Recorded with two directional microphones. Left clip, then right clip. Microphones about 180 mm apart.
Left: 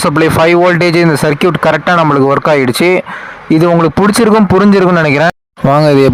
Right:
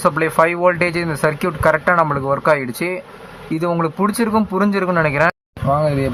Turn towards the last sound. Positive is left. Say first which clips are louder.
# left 10 dB
turn(degrees=75)  # may be behind; listen again after turning